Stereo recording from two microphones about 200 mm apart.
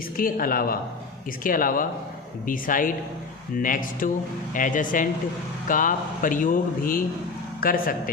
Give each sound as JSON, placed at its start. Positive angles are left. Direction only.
{"t": 0.2, "sound": "speech", "side_deg": 45}